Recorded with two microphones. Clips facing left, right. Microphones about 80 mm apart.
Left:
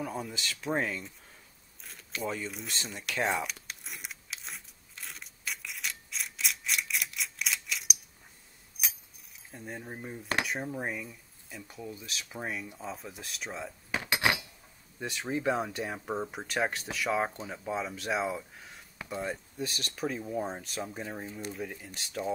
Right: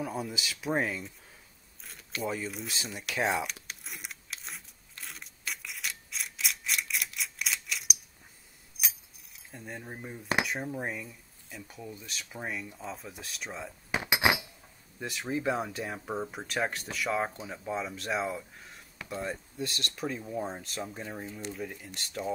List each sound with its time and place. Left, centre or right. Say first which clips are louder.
0.0 s speech: right 1 dB; centre
1.8 s a sound: right 1 dB; centre
8.8 s chink: even; centre
9.5 s speech: left 1 dB; centre
13.9 s a sound: right 2 dB; centre
15.0 s speech: even; centre